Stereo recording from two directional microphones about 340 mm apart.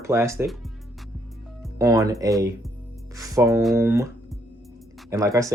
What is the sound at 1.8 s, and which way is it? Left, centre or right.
Speech, centre.